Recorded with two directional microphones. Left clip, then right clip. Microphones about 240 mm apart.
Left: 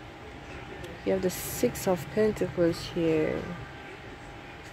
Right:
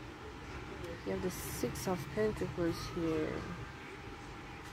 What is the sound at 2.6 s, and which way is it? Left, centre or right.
Speech, left.